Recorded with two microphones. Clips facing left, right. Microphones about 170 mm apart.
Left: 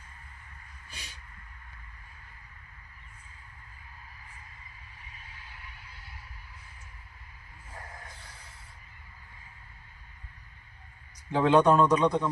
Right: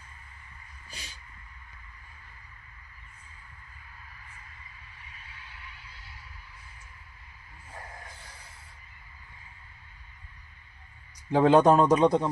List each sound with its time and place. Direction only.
11.3 s speech: 35° right (ahead or behind)